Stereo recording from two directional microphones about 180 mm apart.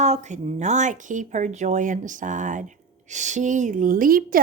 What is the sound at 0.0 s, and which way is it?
Speech, 40° right (ahead or behind).